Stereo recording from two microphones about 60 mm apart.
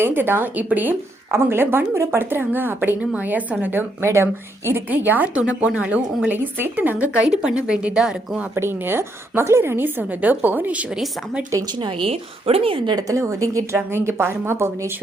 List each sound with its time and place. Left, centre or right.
0.1 s a woman's voice: right
1.3 s a woman's voice: right
3.0 s a woman's voice: right
4.0 s a woman's voice: right
4.9 s a woman's voice: right
6.2 s a woman's voice: right; by 8.4 s centre
8.5 s a woman's voice: right
10.8 s a woman's voice: centre
13.0 s a woman's voice: right
13.7 s a woman's voice: right